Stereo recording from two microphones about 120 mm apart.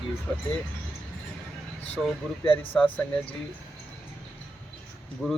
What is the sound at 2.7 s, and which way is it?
Speech, 10° left (ahead or behind).